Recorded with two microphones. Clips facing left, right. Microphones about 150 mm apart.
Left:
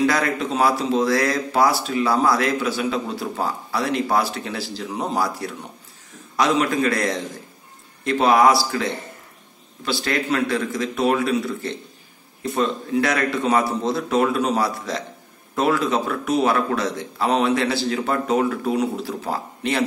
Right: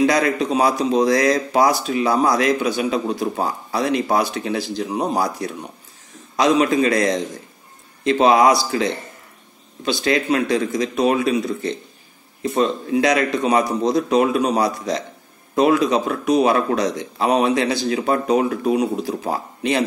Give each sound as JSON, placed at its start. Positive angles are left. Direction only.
{"t": 0.0, "sound": "a man's voice", "side_deg": -20}